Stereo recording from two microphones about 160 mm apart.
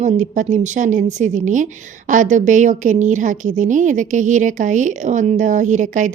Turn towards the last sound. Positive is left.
turn(degrees=-50)  # may be behind; listen again after turning